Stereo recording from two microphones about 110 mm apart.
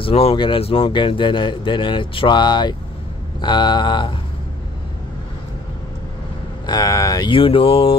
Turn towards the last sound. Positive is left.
turn(degrees=55)  # may be behind; listen again after turning